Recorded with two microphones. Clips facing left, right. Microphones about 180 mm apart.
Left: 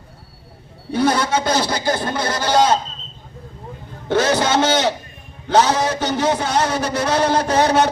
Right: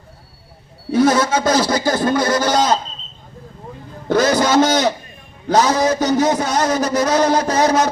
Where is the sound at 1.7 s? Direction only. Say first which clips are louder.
Right 4 dB; 45° right (ahead or behind).